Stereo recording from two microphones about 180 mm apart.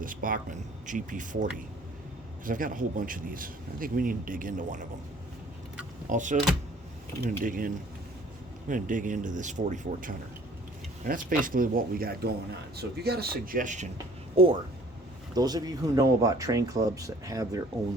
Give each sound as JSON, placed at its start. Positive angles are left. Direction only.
{"t": 0.0, "sound": "speech", "side_deg": -50}
{"t": 6.1, "sound": "speech", "side_deg": -45}
{"t": 7.4, "sound": "speech", "side_deg": -50}
{"t": 14.4, "sound": "speech", "side_deg": -30}